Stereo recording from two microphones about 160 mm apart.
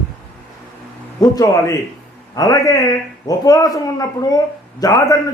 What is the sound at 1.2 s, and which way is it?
A man's voice, 20° left (ahead or behind).